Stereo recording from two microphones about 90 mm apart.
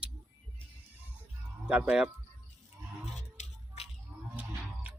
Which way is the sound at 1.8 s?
10° right (ahead or behind).